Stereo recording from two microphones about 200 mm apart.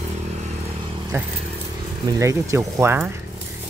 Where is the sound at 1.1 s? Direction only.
15° right (ahead or behind).